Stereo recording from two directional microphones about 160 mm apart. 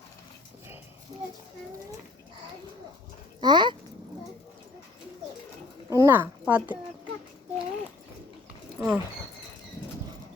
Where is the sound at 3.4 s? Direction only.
30° right (ahead or behind).